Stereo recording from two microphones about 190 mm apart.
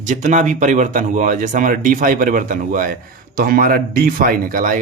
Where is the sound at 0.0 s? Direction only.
40° right (ahead or behind).